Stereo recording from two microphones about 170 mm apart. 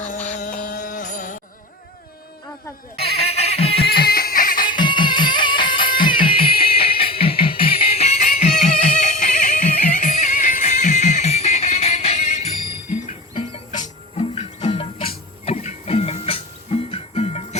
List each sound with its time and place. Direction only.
0.0 s music: 45° left (ahead or behind)
3.2 s a sound: 35° left (ahead or behind)
3.8 s a sound: 65° left (ahead or behind)
4.7 s music: 25° left (ahead or behind)
6.5 s music: 60° left (ahead or behind)
6.7 s music: 35° left (ahead or behind)
13.7 s music: 50° left (ahead or behind)